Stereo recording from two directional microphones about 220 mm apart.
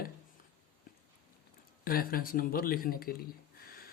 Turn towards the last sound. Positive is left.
turn(degrees=45)  # may be behind; listen again after turning